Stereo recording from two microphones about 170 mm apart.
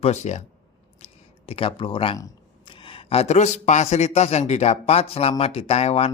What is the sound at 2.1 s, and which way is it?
Speech, 25° left (ahead or behind).